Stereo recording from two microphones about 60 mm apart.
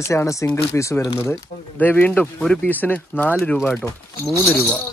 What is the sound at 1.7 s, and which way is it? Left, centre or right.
Speech, left.